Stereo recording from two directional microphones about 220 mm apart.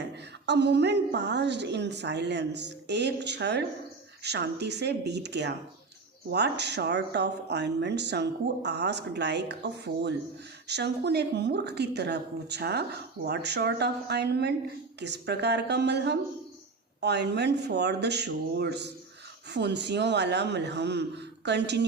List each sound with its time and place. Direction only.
0.4 s speech: 50° right (ahead or behind)